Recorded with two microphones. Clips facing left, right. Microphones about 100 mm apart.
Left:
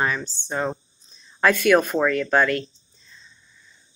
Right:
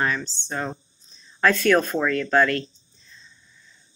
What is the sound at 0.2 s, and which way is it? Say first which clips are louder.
Speech: even; 50° left (ahead or behind).